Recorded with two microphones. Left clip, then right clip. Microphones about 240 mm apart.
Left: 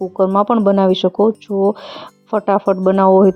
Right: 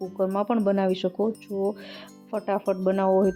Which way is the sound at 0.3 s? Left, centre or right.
Left.